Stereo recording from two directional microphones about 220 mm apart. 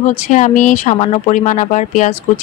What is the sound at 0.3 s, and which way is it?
Speech, 35° left (ahead or behind).